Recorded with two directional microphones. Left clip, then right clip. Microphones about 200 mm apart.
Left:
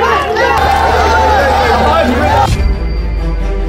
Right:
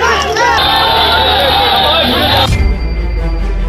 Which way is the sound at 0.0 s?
30° right (ahead or behind).